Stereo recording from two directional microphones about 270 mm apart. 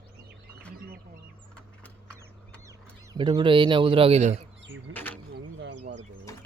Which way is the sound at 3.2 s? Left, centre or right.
Centre.